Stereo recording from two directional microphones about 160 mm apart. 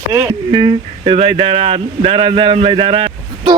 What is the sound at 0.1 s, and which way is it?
Speech, 15° right (ahead or behind).